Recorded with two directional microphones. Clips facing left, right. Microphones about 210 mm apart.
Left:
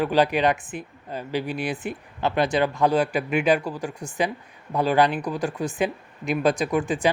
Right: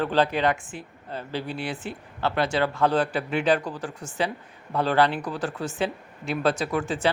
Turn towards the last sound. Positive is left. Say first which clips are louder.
# left 3 dB
turn(degrees=15)  # may be behind; listen again after turning